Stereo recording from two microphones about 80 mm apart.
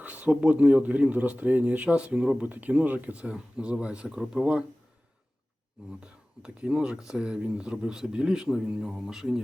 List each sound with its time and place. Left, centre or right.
0.0 s speech: centre
6.4 s speech: centre